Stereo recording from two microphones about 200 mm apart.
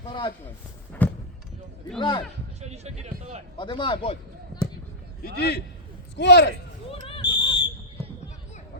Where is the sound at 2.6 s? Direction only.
35° right (ahead or behind).